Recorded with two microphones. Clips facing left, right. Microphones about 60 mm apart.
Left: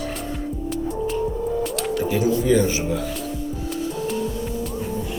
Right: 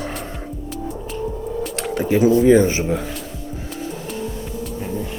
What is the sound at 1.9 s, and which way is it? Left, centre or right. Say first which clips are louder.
Speech: right 7 dB; right.